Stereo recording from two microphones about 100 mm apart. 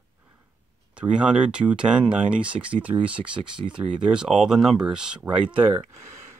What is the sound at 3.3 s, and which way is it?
Speech, 55° right (ahead or behind).